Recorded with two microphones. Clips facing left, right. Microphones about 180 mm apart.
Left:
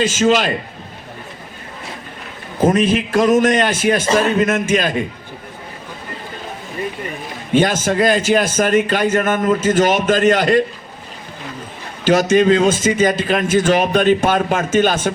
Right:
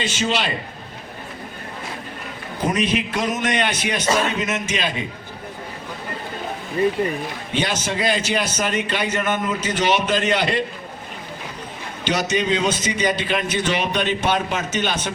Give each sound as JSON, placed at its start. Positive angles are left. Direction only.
{"t": 0.0, "sound": "a man's voice", "side_deg": 45}
{"t": 2.6, "sound": "a man's voice", "side_deg": 45}
{"t": 7.5, "sound": "a man's voice", "side_deg": 50}
{"t": 12.0, "sound": "a man's voice", "side_deg": 50}